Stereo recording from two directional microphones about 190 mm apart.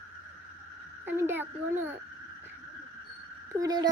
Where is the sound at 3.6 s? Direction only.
20° right (ahead or behind).